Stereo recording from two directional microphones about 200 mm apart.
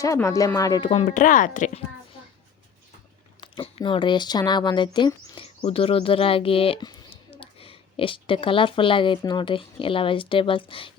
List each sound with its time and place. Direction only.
0.0 s speech: 15° left (ahead or behind)
0.9 s speech: 35° left (ahead or behind)
3.4 s speech: 25° left (ahead or behind)